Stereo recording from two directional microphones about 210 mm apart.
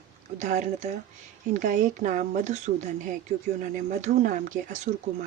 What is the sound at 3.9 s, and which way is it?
Speech, 35° right (ahead or behind).